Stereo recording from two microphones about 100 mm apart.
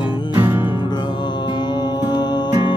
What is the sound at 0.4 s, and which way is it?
Music, 20° right (ahead or behind).